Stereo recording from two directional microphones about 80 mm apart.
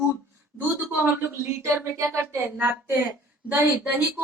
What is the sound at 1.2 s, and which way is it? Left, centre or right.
Speech, right.